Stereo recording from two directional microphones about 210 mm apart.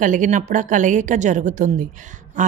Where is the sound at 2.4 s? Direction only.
40° right (ahead or behind).